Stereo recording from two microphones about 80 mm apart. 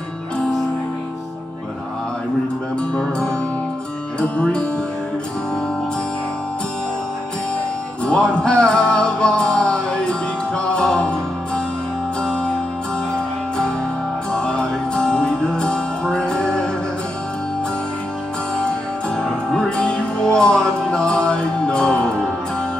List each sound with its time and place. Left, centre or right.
2.9 s music: centre
8.0 s music: centre
14.3 s music: centre
19.1 s music: centre